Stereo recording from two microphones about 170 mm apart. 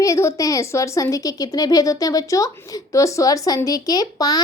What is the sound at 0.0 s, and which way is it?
Speech, 20° left (ahead or behind).